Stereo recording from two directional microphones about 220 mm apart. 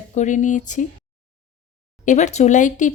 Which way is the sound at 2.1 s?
30° left (ahead or behind).